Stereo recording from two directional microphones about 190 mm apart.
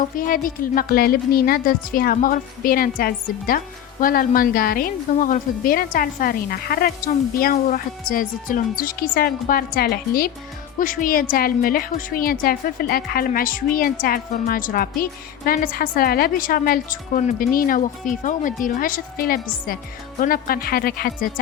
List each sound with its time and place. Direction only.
0.2 s a woman's voice: 45° left (ahead or behind)